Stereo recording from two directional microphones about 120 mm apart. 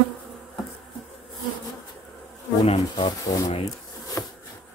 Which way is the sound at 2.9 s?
35° left (ahead or behind).